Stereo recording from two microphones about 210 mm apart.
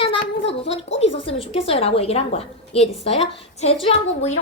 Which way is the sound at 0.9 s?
25° left (ahead or behind).